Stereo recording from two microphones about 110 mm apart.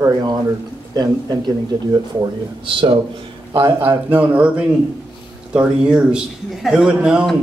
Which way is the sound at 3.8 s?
15° right (ahead or behind).